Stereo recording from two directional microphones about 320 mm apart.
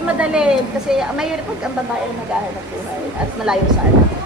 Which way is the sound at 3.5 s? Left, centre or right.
Centre.